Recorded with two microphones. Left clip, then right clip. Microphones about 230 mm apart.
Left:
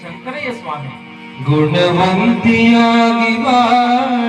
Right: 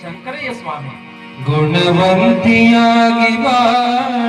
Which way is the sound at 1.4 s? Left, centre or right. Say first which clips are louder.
Left 1 dB; right.